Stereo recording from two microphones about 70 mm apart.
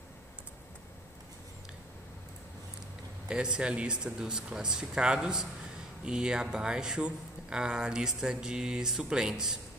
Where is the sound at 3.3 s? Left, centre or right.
Centre.